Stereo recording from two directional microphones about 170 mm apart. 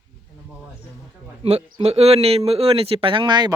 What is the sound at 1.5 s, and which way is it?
Speech, 40° right (ahead or behind).